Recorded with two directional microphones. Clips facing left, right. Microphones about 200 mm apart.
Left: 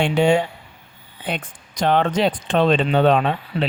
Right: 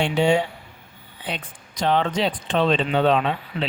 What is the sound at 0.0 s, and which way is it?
Speech, 50° left (ahead or behind).